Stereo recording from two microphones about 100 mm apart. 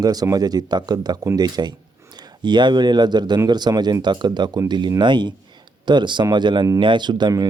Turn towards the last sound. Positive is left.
turn(degrees=-45)  # may be behind; listen again after turning